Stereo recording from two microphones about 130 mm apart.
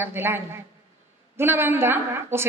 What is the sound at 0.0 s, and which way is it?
A woman's voice, 20° right (ahead or behind).